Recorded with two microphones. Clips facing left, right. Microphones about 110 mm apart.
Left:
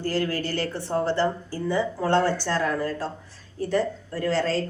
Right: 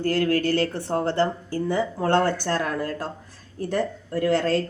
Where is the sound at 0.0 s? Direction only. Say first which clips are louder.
Right 4 dB; 55° right (ahead or behind).